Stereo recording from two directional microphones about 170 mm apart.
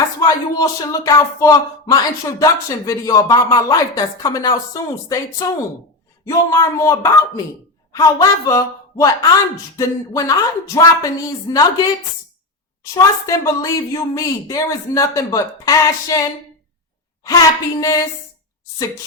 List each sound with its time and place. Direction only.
0.2 s a woman's voice: 20° left (ahead or behind)